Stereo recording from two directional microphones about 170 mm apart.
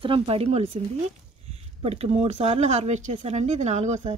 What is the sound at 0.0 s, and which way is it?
Speech, 35° right (ahead or behind).